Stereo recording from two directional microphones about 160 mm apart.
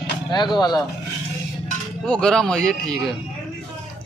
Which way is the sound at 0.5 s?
25° left (ahead or behind).